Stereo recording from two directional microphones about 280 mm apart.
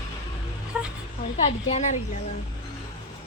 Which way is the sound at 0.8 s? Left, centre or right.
Centre.